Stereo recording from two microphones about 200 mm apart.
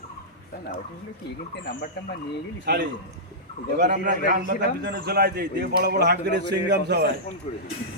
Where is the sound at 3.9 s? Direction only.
40° right (ahead or behind).